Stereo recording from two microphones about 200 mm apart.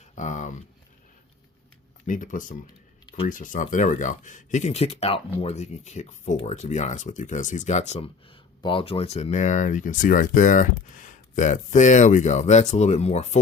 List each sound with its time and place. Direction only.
0.2 s speech: 35° left (ahead or behind)
2.0 s speech: 40° left (ahead or behind)